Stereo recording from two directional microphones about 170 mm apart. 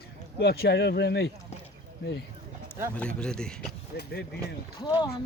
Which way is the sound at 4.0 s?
70° left (ahead or behind).